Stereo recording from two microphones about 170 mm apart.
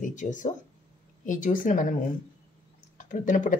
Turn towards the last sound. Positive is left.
turn(degrees=50)  # may be behind; listen again after turning